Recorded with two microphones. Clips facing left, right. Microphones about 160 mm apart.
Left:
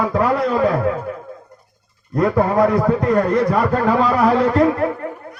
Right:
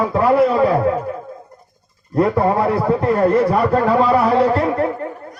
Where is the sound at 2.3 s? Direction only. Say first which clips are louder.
Left 1 dB; 30° right (ahead or behind).